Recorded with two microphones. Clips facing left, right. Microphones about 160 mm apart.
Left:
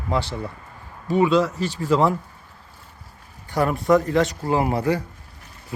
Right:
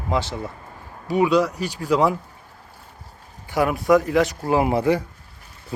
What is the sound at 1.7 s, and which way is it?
Speech, centre (ahead or behind).